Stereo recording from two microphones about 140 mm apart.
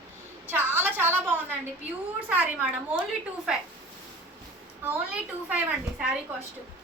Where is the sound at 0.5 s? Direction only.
15° right (ahead or behind).